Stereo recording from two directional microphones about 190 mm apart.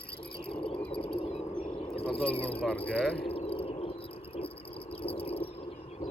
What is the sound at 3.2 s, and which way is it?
Cricket, 30° left (ahead or behind).